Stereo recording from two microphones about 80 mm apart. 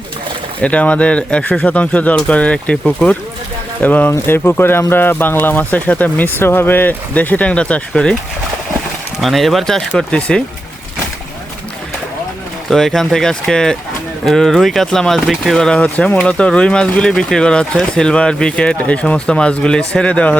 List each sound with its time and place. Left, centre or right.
0.6 s speech: centre
9.2 s speech: centre
10.1 s speech: centre
12.7 s speech: centre